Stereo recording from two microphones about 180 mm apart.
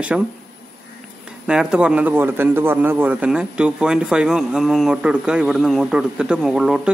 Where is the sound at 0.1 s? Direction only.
5° right (ahead or behind).